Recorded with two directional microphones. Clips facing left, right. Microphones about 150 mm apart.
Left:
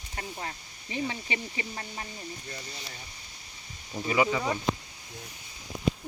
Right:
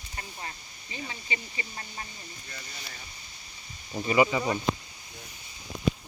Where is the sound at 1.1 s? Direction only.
65° left (ahead or behind).